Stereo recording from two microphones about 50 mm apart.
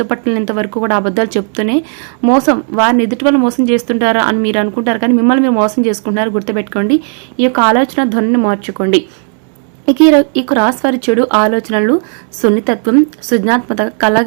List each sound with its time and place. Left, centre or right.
0.0 s speech: centre
5.2 s speech: centre
6.8 s speech: centre
9.8 s speech: centre
11.3 s speech: right